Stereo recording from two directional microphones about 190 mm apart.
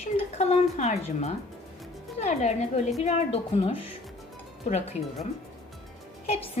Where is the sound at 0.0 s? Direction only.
35° left (ahead or behind).